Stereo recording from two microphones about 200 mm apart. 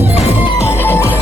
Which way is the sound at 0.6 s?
10° left (ahead or behind).